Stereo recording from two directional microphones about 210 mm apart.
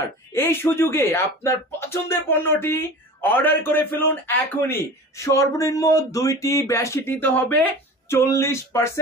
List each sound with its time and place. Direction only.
0.3 s speech: 10° left (ahead or behind)